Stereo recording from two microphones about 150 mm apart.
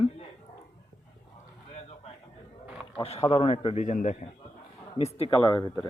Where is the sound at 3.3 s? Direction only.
40° left (ahead or behind).